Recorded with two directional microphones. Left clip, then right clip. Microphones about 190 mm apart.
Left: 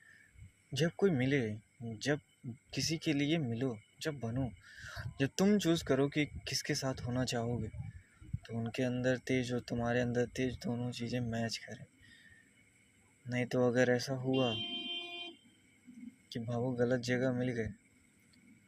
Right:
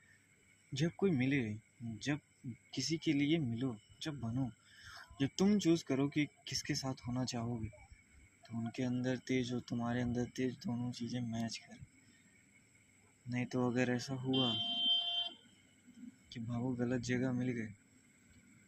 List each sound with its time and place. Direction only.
0.7 s speech: 60° left (ahead or behind)
13.3 s speech: 60° left (ahead or behind)
16.3 s speech: 60° left (ahead or behind)